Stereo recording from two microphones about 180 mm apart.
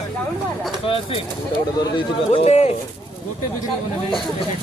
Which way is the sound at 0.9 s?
30° left (ahead or behind).